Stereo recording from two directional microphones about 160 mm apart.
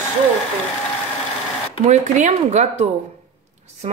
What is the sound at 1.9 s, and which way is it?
Speech, 45° right (ahead or behind).